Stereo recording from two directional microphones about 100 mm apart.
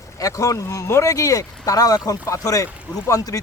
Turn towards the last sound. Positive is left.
turn(degrees=35)  # may be behind; listen again after turning